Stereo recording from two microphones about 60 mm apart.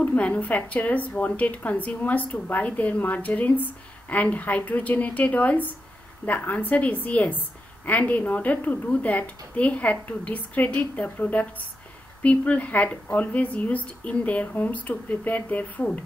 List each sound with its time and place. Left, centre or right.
0.0 s a woman's voice: left